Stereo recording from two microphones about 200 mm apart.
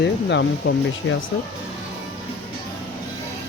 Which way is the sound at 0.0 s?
60° left (ahead or behind).